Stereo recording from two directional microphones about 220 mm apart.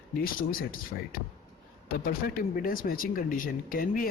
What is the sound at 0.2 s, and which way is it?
Speech, 40° left (ahead or behind).